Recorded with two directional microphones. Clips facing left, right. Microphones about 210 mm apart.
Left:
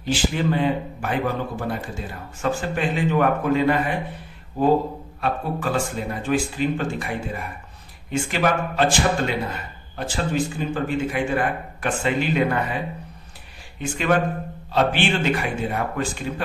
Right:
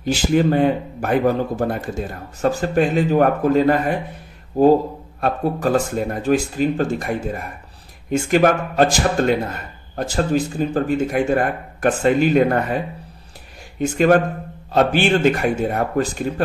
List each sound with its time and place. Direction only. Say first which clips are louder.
0.0 s speech: right 6 dB; 45° right (ahead or behind)